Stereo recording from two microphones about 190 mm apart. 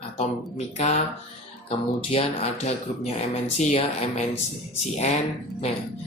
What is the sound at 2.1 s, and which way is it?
Speech, 30° left (ahead or behind).